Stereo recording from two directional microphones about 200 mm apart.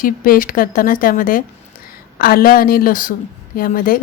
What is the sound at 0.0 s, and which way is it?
Speech, 45° left (ahead or behind).